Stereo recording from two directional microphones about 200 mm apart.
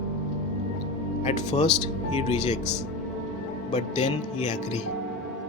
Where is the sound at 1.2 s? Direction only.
35° left (ahead or behind).